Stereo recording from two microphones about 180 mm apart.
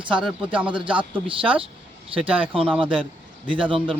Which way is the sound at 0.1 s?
5° right (ahead or behind).